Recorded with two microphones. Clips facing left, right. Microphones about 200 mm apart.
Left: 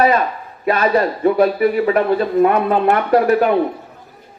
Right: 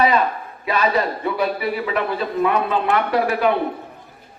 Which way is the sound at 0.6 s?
50° left (ahead or behind).